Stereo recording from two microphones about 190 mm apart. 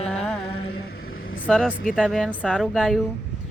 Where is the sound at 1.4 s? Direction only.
Centre (ahead or behind).